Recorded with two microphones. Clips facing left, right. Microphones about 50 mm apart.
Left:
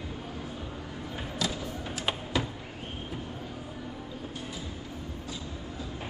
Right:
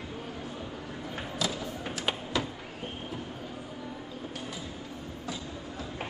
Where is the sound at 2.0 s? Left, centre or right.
Centre.